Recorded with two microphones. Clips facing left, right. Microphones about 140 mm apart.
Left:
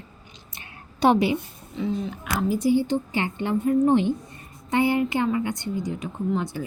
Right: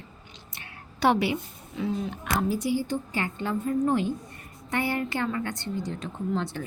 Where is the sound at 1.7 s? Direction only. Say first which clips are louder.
Left 2 dB; 5° right (ahead or behind).